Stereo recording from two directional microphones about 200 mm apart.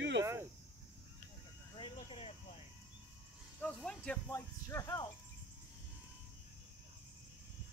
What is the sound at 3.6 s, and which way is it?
Speech, 5° left (ahead or behind).